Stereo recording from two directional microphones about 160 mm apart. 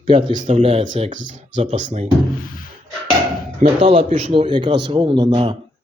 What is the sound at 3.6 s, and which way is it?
A man's voice, 35° right (ahead or behind).